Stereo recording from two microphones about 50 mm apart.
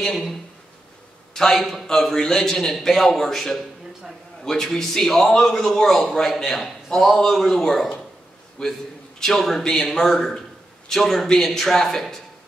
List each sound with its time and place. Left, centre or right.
0.0 s a man's voice: centre
1.3 s a man's voice: centre
8.6 s a man's voice: centre